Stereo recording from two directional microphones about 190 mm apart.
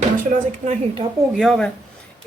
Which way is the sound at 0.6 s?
35° right (ahead or behind).